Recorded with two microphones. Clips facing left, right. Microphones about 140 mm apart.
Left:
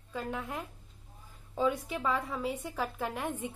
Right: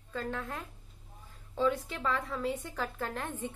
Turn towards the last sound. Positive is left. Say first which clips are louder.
# left 2 dB
turn(degrees=10)  # may be behind; listen again after turning